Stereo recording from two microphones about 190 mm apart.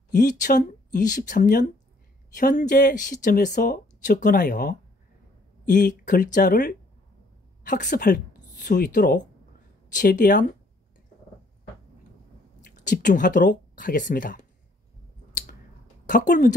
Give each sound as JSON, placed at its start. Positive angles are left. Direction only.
{"t": 0.1, "sound": "speech", "side_deg": 45}
{"t": 12.7, "sound": "speech", "side_deg": 45}
{"t": 16.1, "sound": "speech", "side_deg": 40}